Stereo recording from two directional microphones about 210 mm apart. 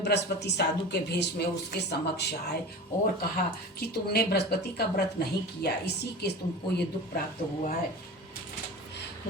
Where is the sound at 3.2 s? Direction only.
50° left (ahead or behind).